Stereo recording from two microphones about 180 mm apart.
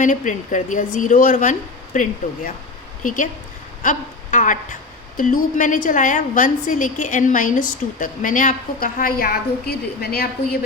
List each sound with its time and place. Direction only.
0.0 s a woman's voice: 45° left (ahead or behind)